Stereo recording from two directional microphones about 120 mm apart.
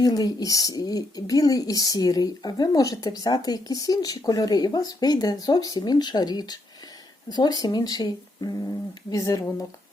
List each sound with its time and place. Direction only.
0.0 s speech: 30° left (ahead or behind)